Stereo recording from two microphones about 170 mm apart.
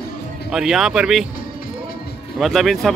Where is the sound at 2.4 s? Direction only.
Centre (ahead or behind).